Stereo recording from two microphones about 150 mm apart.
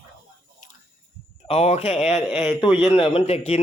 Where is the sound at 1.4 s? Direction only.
45° left (ahead or behind).